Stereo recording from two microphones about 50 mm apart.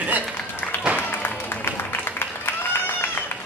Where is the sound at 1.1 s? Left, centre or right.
Left.